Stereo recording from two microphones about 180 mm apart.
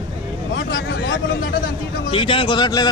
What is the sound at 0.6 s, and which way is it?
Speech, 75° left (ahead or behind).